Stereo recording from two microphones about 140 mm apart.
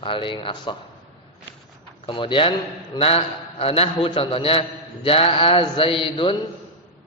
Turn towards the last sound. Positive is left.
turn(degrees=40)  # may be behind; listen again after turning